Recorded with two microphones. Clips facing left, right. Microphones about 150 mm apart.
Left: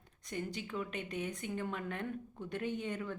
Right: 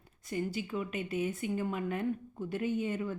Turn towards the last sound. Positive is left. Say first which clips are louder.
# right 5 dB
turn(degrees=-5)  # may be behind; listen again after turning